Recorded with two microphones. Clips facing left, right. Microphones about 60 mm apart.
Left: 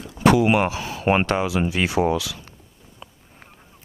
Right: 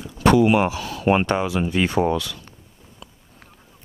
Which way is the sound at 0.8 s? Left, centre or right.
Left.